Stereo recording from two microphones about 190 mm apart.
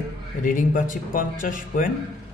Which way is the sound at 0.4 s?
45° left (ahead or behind).